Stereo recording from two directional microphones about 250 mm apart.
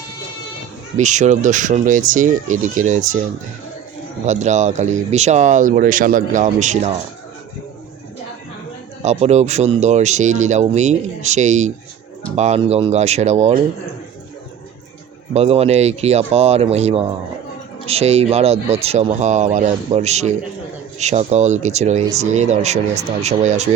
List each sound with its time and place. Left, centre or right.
0.9 s speech: right
4.3 s speech: right
9.0 s speech: right
15.3 s speech: right